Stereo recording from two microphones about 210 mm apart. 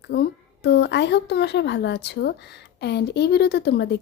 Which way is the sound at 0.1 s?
50° left (ahead or behind).